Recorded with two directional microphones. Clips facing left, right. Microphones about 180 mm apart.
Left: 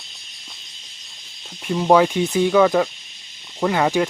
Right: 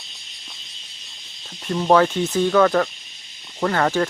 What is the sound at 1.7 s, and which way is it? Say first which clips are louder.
Speech: left 1 dB; 10° left (ahead or behind).